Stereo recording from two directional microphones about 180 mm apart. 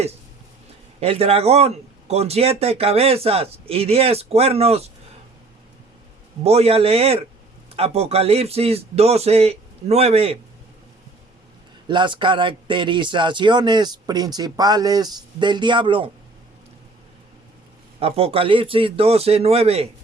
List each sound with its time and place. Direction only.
0.9 s speech: 35° right (ahead or behind)
6.4 s speech: 35° right (ahead or behind)
11.9 s speech: 25° right (ahead or behind)
18.0 s speech: 30° right (ahead or behind)